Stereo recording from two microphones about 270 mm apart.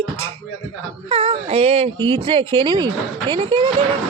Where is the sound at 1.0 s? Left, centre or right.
Centre.